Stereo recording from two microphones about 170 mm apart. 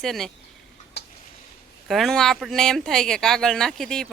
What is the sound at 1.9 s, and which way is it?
Speech, centre (ahead or behind).